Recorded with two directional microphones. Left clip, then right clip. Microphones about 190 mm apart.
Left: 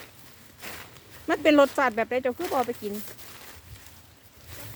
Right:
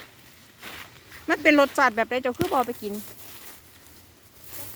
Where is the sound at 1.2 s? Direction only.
Centre (ahead or behind); by 2.9 s 25° right (ahead or behind).